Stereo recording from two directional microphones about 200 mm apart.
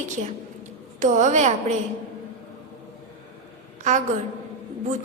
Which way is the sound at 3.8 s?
35° right (ahead or behind).